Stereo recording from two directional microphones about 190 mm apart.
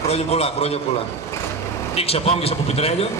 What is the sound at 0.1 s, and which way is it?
Speech, 35° left (ahead or behind).